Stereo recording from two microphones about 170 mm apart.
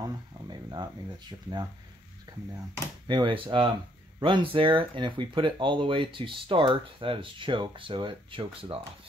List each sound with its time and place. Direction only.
0.0 s speech: 25° right (ahead or behind)
3.1 s speech: 30° right (ahead or behind)